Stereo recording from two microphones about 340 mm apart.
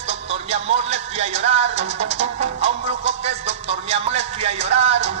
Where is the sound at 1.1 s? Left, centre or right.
Centre.